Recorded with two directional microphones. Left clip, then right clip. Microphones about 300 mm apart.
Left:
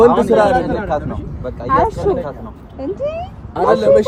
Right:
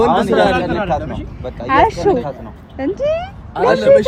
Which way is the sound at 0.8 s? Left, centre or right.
Right.